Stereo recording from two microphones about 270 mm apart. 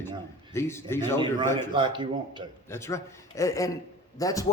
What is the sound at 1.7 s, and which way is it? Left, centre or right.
Speech, centre.